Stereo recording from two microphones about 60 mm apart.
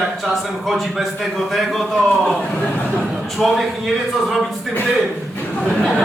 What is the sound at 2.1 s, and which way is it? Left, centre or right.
Speech, centre.